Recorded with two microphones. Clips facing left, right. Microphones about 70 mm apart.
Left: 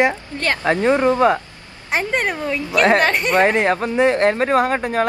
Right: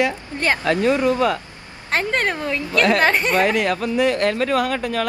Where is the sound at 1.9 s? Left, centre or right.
Centre.